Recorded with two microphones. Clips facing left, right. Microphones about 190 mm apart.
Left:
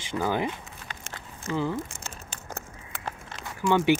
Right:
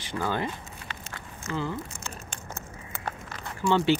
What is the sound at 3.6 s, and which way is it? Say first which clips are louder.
Speech: left 1 dB; 15° left (ahead or behind).